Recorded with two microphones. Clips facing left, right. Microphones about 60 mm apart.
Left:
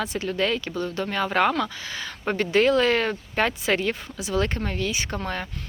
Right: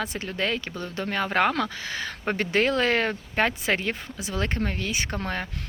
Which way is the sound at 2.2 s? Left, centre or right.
Right.